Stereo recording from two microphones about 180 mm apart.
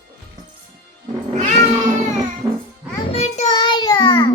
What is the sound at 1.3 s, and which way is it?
Cat, 45° right (ahead or behind).